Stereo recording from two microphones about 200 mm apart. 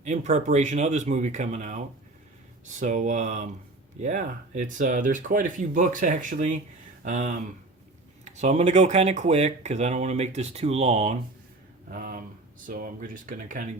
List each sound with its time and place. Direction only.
0.0 s speech: 35° right (ahead or behind)
11.9 s speech: 45° right (ahead or behind)